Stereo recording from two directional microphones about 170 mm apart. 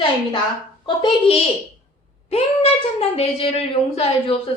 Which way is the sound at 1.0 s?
30° left (ahead or behind).